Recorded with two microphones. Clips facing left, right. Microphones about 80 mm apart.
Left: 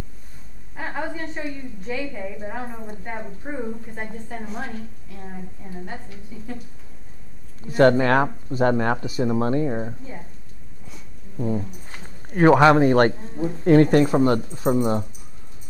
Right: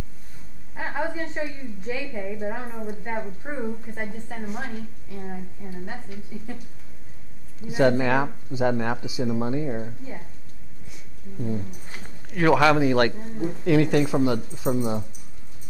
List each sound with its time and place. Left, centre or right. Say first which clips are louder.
0.7 s a woman's voice: right 1 dB; centre
6.3 s speech: right 1 dB; centre
7.7 s speech: left 4 dB; left
11.3 s speech: left 4 dB; left
12.7 s speech: left 4 dB; left